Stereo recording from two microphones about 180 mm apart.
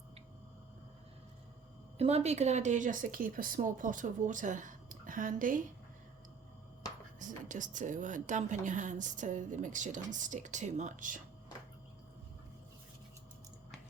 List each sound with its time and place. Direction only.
2.0 s a woman's voice: 35° right (ahead or behind)
7.2 s a woman's voice: 45° right (ahead or behind)